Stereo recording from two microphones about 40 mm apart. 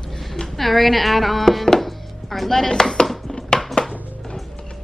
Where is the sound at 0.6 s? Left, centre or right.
Centre.